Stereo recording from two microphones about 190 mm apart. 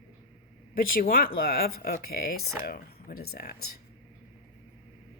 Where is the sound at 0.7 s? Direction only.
50° left (ahead or behind).